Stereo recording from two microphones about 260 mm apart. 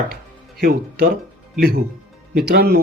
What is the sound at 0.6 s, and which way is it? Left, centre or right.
Speech, right.